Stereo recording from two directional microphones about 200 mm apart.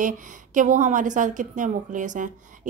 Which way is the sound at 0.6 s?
40° right (ahead or behind).